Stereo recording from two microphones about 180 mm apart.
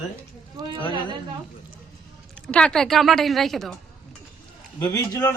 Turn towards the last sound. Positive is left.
turn(degrees=20)  # may be behind; listen again after turning